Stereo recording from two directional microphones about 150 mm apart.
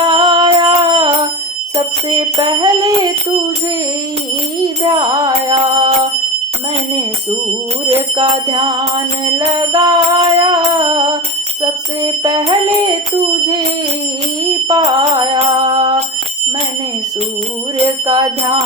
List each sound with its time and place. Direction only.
0.0 s music: 30° right (ahead or behind)
4.8 s a sound: 25° right (ahead or behind)
7.9 s music: 30° right (ahead or behind)
14.7 s music: 30° right (ahead or behind)
18.0 s music: 25° right (ahead or behind)